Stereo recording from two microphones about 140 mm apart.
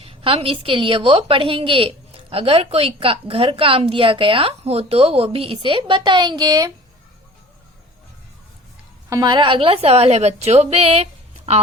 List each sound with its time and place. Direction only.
0.0 s a woman's voice: 40° right (ahead or behind)
9.0 s a woman's voice: 25° right (ahead or behind); by 11.6 s 50° right (ahead or behind)